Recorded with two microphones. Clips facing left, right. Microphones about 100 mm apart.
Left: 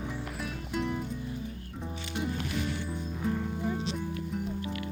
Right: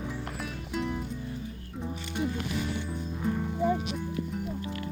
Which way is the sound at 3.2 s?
Centre (ahead or behind).